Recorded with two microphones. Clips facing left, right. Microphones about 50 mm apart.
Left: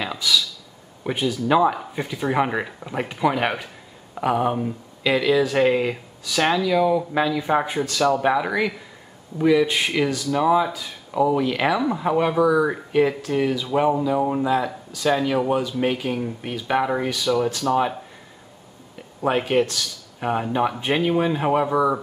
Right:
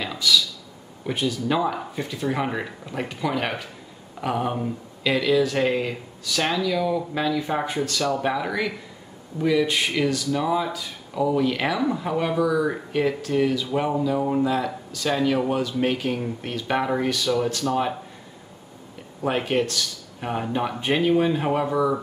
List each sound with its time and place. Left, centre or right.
0.0 s a sound: centre
1.0 s speech: centre
19.2 s speech: centre